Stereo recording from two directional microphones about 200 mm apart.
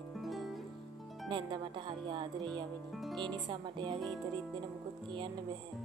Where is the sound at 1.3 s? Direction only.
25° right (ahead or behind).